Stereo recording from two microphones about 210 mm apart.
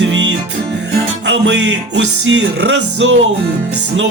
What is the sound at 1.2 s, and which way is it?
Music, 60° right (ahead or behind).